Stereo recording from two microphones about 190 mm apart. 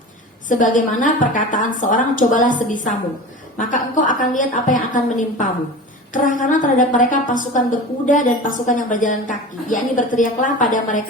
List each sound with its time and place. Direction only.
0.4 s a woman's voice: 40° left (ahead or behind)